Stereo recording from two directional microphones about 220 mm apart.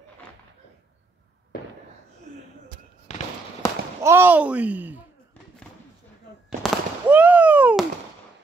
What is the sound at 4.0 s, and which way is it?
Speech, 10° right (ahead or behind).